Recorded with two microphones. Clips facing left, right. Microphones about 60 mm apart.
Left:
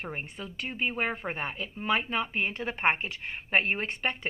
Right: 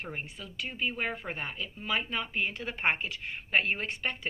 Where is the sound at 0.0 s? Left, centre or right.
Left.